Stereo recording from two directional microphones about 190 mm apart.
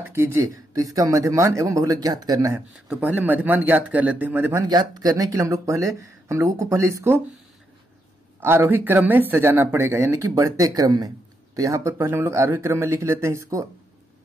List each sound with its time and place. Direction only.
0.0 s speech: 15° right (ahead or behind)
8.4 s speech: 10° right (ahead or behind)